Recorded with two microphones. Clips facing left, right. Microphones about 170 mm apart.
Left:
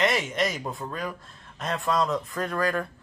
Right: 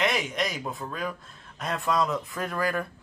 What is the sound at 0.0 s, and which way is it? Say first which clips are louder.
Speech: left 2 dB; centre (ahead or behind).